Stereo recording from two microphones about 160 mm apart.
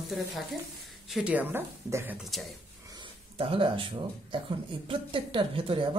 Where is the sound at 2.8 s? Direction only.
30° right (ahead or behind).